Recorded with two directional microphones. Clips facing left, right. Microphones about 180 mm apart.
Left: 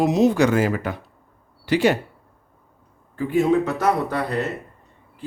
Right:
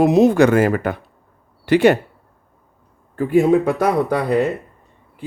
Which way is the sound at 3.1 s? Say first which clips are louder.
Right 4 dB; 50° right (ahead or behind).